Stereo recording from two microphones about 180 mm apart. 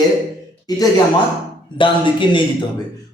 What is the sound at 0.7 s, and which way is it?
A man's voice, 20° left (ahead or behind).